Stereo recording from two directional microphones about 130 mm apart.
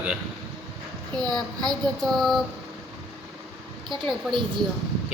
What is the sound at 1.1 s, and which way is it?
Speech, 30° right (ahead or behind).